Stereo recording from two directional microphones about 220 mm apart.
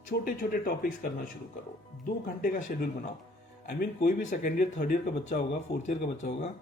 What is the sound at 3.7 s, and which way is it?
Speech, 40° left (ahead or behind).